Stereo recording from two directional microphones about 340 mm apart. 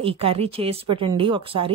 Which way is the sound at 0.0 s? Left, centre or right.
Centre.